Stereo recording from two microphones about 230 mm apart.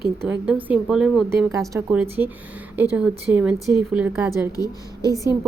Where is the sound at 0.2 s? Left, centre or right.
Centre.